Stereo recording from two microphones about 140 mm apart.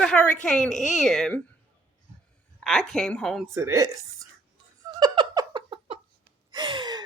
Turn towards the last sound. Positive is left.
turn(degrees=-35)  # may be behind; listen again after turning